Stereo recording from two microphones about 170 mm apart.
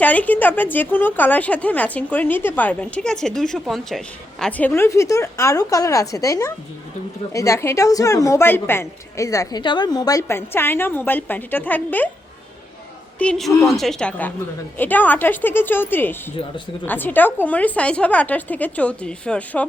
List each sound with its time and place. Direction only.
0.0 s a woman's voice: 10° left (ahead or behind)
13.1 s a woman's voice: 5° left (ahead or behind)